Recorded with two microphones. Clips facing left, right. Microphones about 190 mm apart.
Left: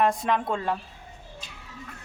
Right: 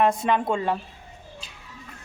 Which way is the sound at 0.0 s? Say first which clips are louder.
Right 2 dB; centre (ahead or behind).